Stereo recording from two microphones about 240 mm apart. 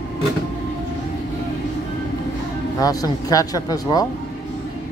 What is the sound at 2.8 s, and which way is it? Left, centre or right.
Speech, centre.